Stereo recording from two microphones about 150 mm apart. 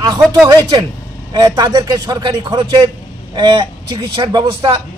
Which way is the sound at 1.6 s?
25° right (ahead or behind).